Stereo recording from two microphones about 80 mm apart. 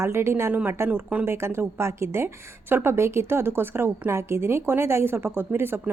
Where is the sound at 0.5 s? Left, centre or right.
Right.